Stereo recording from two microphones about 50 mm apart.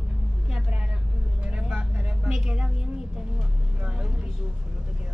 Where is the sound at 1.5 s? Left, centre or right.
Right.